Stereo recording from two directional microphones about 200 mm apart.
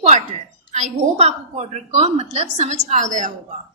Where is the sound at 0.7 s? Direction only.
35° right (ahead or behind).